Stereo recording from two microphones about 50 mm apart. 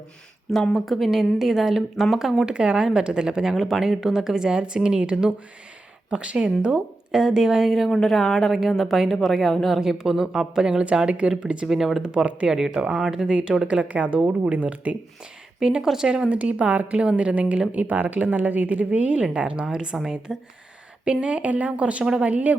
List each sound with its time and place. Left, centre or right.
0.7 s speech: centre
2.5 s a woman's voice: centre
11.6 s speech: centre
12.0 s a woman's voice: right
12.5 s a woman's voice: centre; by 14.9 s right
15.6 s a woman's voice: centre
16.3 s a woman's voice: right